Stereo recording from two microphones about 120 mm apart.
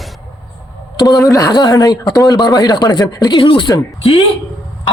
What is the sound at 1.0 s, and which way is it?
Speech, 30° left (ahead or behind).